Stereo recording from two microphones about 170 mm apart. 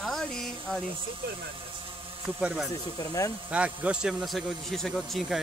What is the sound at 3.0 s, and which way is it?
Speech, 20° left (ahead or behind).